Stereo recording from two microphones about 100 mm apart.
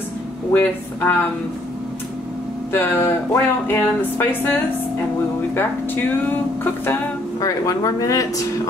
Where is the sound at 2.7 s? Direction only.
20° left (ahead or behind).